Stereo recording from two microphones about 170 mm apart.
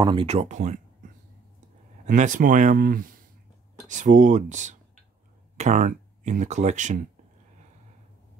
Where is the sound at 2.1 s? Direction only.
50° right (ahead or behind).